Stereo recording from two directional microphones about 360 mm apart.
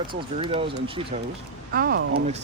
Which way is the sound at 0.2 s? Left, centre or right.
Centre.